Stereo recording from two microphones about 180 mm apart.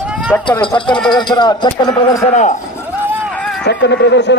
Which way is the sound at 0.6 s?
25° left (ahead or behind).